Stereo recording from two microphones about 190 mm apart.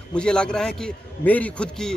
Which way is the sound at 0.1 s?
5° left (ahead or behind).